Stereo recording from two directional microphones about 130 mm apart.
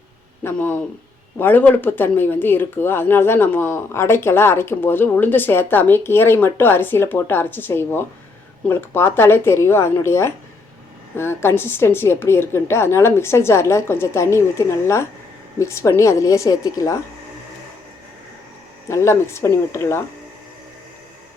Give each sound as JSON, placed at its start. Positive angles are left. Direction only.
{"t": 0.4, "sound": "a woman's voice", "side_deg": 15}
{"t": 18.9, "sound": "a woman's voice", "side_deg": 20}